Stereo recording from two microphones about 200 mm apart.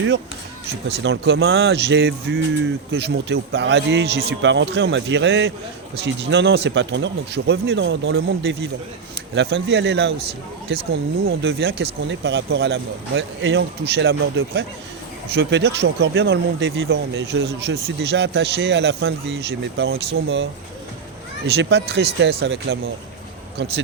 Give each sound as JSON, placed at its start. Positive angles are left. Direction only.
{"t": 0.9, "sound": "speech", "side_deg": -60}
{"t": 21.5, "sound": "speech", "side_deg": -55}